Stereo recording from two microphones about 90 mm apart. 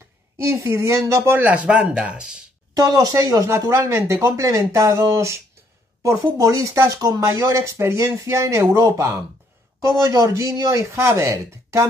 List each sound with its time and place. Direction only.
0.4 s speech: 30° right (ahead or behind)
1.3 s speech: 15° right (ahead or behind)
2.8 s speech: 40° right (ahead or behind)